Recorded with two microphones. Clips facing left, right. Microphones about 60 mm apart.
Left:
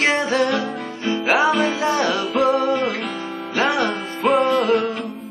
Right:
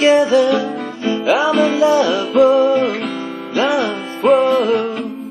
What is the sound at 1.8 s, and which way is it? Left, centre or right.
Music, left.